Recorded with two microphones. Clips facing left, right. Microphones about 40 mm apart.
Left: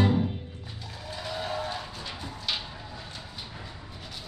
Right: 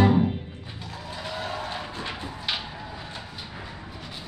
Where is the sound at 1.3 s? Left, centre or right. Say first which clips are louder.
Even; right.